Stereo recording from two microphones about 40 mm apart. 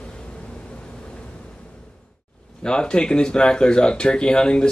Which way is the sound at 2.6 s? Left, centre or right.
Left.